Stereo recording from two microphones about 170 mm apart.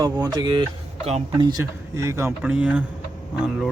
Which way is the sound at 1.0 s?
40° right (ahead or behind).